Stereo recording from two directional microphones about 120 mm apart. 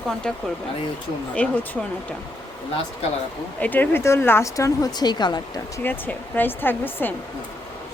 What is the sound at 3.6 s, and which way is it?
Speech, 15° left (ahead or behind).